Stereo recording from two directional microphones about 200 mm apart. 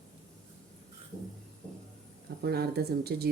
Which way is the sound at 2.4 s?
50° right (ahead or behind).